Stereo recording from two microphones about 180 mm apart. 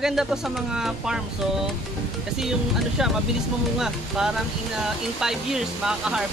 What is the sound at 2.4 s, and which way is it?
Speech, centre (ahead or behind).